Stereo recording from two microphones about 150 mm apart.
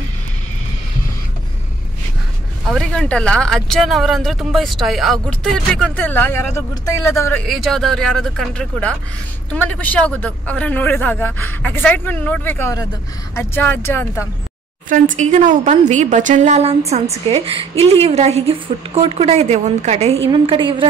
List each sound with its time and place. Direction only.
2.7 s speech: 5° left (ahead or behind)
7.4 s speech: centre (ahead or behind)
14.9 s a woman's voice: 55° right (ahead or behind)
20.2 s a woman's voice: 35° right (ahead or behind)